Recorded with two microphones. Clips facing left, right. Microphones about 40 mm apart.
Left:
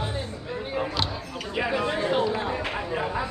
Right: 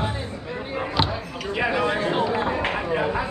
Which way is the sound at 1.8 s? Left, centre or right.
Right.